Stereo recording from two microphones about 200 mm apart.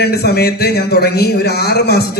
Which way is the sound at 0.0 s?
55° left (ahead or behind).